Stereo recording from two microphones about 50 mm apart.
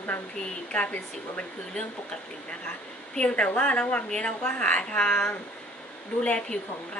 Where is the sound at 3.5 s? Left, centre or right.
Left.